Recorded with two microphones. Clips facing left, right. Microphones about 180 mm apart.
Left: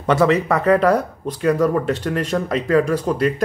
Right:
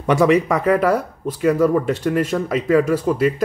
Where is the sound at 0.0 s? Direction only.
10° right (ahead or behind).